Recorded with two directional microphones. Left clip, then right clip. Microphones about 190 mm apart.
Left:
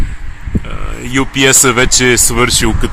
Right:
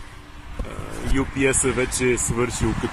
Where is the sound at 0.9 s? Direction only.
30° left (ahead or behind).